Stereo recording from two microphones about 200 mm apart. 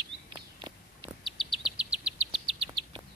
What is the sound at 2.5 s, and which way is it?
Bird, 25° right (ahead or behind).